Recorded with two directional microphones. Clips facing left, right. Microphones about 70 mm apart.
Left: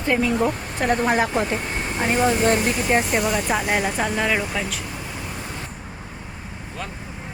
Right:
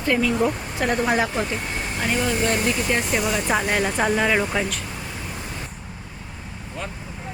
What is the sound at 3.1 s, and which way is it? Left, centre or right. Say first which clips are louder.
Speech: left 1 dB; centre.